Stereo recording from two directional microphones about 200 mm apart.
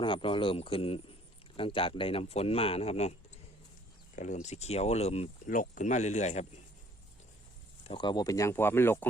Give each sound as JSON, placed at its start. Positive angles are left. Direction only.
{"t": 0.0, "sound": "speech", "side_deg": 25}
{"t": 7.9, "sound": "speech", "side_deg": 25}